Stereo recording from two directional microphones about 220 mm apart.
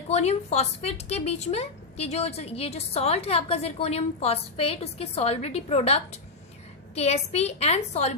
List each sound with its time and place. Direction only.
0.1 s a woman's voice: 30° left (ahead or behind)